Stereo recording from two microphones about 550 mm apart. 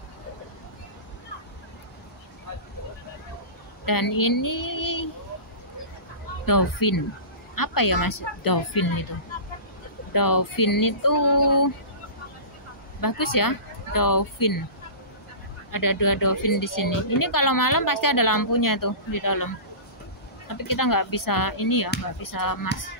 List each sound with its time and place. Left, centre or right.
3.8 s speech: left
6.4 s a woman's voice: left
10.1 s a woman's voice: left
13.0 s speech: left
15.7 s a woman's voice: left
20.5 s a woman's voice: left